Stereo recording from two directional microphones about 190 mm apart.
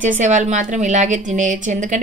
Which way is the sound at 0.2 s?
40° right (ahead or behind).